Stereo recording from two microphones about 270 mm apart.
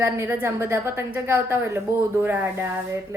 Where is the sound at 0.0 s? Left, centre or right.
Centre.